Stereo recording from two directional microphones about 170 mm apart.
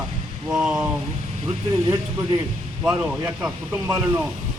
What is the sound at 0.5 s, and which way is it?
Speech, 5° right (ahead or behind).